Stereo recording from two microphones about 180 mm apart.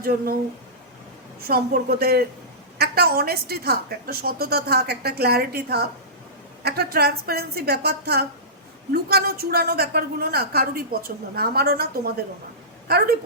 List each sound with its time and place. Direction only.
1.4 s a woman's voice: 60° right (ahead or behind)